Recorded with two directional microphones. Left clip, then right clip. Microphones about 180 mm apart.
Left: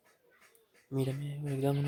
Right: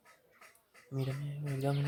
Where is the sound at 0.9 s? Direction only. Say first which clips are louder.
Left 5 dB; 50° left (ahead or behind).